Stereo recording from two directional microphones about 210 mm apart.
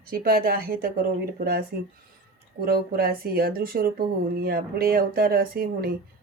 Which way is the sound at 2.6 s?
45° right (ahead or behind).